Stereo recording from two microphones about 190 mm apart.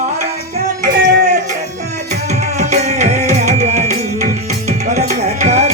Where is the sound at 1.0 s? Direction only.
40° right (ahead or behind).